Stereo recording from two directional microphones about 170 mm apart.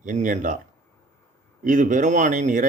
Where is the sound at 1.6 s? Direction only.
50° right (ahead or behind).